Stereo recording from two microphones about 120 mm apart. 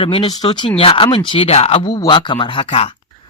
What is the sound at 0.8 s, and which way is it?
Speech, 50° left (ahead or behind).